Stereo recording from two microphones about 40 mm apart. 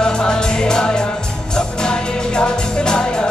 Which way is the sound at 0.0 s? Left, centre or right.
Centre.